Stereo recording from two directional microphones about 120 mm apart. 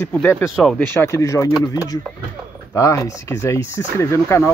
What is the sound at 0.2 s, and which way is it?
Speech, 20° left (ahead or behind).